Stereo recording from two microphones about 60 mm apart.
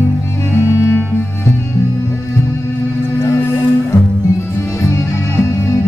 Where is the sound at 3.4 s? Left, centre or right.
Left.